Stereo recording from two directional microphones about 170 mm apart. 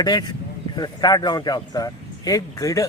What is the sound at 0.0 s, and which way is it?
Speech, 25° left (ahead or behind).